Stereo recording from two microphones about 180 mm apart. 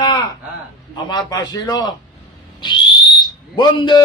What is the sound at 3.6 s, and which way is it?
Speech, 25° left (ahead or behind).